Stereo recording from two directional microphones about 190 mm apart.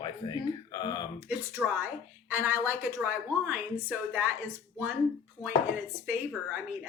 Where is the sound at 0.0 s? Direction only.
20° left (ahead or behind).